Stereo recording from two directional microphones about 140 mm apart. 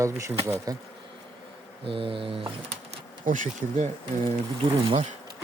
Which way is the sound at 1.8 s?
40° right (ahead or behind).